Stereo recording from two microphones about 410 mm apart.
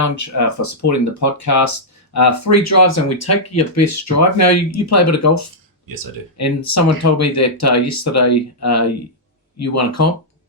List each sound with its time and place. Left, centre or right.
0.0 s speech: left